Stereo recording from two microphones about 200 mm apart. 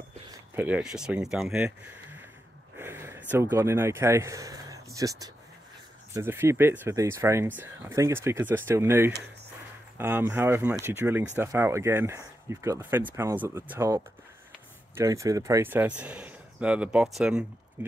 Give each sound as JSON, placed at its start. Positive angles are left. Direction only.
{"t": 0.6, "sound": "speech", "side_deg": -5}